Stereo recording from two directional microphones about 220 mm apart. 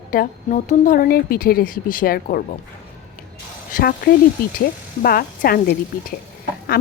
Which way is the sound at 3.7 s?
40° left (ahead or behind).